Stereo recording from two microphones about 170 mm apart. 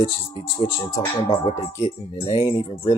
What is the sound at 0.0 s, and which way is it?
Speech, 30° left (ahead or behind).